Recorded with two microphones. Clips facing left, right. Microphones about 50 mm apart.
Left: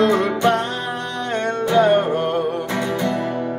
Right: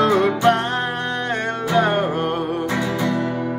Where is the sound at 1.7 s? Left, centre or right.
Right.